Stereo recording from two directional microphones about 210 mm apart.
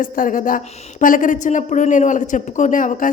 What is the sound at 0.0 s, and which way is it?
A woman's voice, 40° left (ahead or behind).